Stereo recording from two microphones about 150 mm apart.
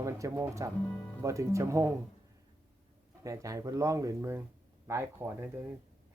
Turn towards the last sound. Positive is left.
turn(degrees=-15)  # may be behind; listen again after turning